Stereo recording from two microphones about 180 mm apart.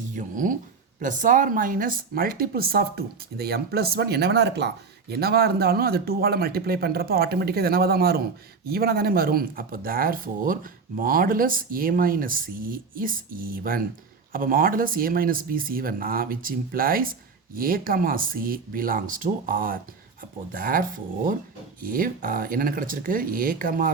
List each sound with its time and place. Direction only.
0.2 s speech: 45° right (ahead or behind)